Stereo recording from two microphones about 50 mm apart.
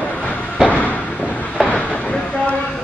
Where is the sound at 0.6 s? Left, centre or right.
Left.